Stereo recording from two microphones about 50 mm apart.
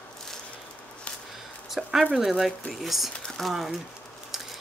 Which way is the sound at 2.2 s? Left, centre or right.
Centre.